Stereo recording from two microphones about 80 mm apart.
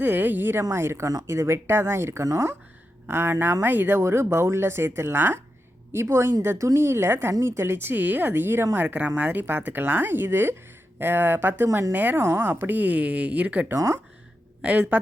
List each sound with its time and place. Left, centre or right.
0.0 s a woman's voice: right
13.7 s speech: right
14.6 s a woman's voice: centre